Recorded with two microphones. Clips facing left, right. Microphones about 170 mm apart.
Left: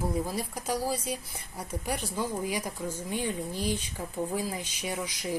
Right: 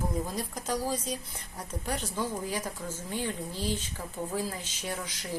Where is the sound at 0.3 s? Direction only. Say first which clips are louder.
Left 1 dB; 10° left (ahead or behind).